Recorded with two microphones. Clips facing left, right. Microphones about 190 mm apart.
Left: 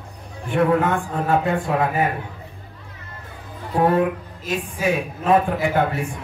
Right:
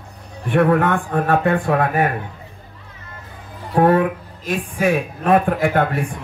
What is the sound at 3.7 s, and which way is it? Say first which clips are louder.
A woman's voice: right 3 dB; 60° right (ahead or behind).